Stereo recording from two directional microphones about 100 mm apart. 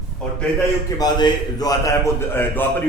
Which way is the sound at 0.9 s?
40° left (ahead or behind).